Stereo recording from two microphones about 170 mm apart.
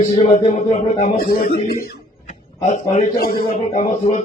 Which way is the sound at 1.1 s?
65° left (ahead or behind).